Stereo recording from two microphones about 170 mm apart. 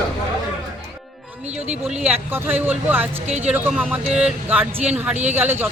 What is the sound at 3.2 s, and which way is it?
Speech, 40° right (ahead or behind).